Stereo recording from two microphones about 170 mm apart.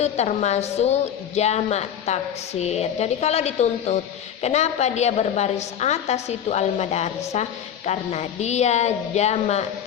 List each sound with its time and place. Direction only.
0.0 s a woman's voice: 40° left (ahead or behind)